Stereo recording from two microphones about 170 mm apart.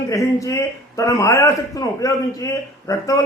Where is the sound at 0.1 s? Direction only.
20° left (ahead or behind).